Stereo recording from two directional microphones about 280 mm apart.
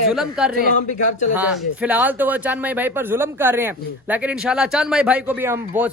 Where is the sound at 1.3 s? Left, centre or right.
Centre.